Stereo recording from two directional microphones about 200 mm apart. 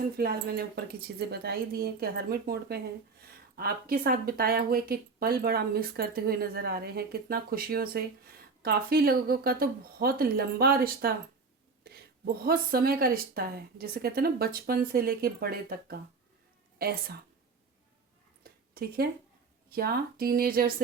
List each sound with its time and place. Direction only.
0.2 s a woman's voice: 50° right (ahead or behind)
18.7 s speech: 50° right (ahead or behind)